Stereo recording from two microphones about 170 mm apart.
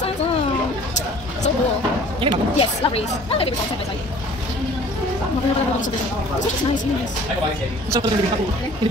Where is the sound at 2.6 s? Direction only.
35° left (ahead or behind).